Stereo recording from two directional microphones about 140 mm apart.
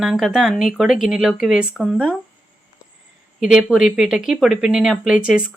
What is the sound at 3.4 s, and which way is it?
Speech, 5° right (ahead or behind).